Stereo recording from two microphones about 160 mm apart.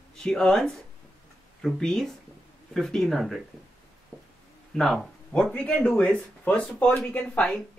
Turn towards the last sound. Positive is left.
turn(degrees=5)  # may be behind; listen again after turning